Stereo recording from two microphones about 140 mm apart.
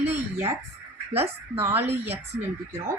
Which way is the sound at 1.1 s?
45° right (ahead or behind).